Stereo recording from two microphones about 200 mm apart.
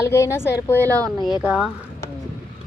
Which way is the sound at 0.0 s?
15° left (ahead or behind).